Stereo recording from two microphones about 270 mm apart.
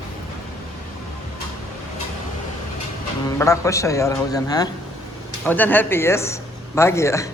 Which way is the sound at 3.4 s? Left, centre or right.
Centre.